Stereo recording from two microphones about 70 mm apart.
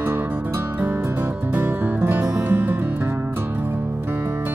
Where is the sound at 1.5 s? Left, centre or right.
Right.